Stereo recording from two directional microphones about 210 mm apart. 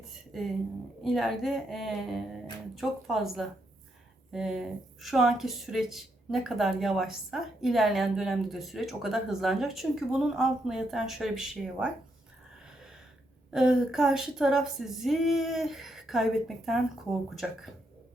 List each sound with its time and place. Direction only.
0.3 s speech: centre (ahead or behind)
13.5 s speech: centre (ahead or behind)